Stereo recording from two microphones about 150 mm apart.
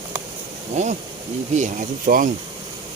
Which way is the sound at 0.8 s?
50° right (ahead or behind).